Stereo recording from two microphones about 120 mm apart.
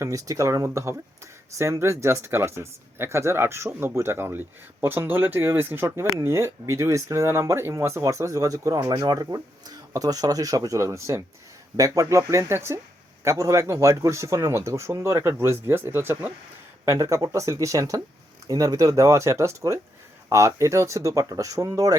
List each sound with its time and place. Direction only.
0.0 s speech: 25° right (ahead or behind)